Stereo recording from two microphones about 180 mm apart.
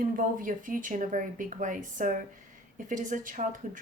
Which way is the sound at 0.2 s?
50° right (ahead or behind).